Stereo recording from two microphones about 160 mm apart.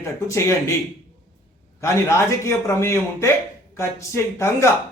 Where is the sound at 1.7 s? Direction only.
20° left (ahead or behind).